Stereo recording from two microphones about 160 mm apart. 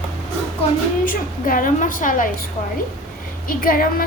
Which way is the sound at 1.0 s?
60° left (ahead or behind).